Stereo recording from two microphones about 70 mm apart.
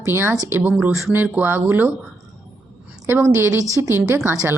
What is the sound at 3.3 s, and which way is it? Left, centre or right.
A woman's voice, right.